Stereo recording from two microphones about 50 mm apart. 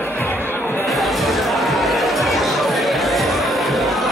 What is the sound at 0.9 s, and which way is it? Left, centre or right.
Music, centre.